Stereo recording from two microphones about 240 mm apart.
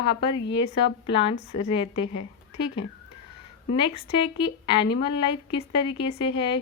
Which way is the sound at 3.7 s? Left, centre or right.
Left.